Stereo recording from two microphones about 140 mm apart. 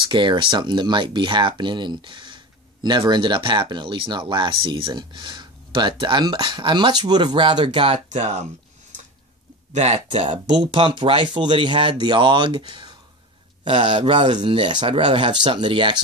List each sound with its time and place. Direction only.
0.1 s speech: 35° right (ahead or behind)
8.1 s speech: 55° right (ahead or behind)
9.8 s speech: 45° right (ahead or behind)